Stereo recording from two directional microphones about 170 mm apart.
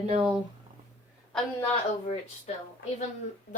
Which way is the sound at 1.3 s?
5° left (ahead or behind).